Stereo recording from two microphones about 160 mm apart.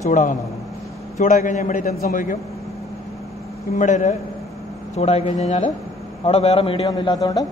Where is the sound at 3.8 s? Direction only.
50° left (ahead or behind).